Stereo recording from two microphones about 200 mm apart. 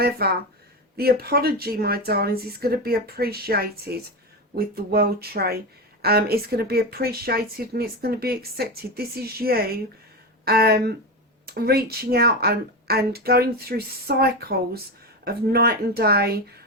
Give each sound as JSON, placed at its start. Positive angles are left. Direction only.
{"t": 0.2, "sound": "speech", "side_deg": -50}